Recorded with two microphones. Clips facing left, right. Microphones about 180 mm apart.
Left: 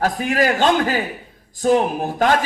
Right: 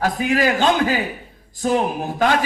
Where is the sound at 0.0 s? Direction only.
45° left (ahead or behind).